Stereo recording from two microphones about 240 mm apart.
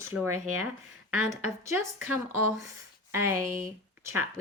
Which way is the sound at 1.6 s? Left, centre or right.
Centre.